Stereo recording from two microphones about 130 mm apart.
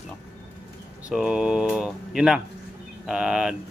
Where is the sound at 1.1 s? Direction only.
5° right (ahead or behind).